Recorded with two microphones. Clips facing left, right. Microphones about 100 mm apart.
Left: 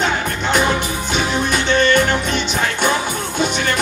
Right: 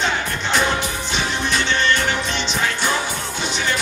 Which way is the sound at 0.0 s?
50° left (ahead or behind).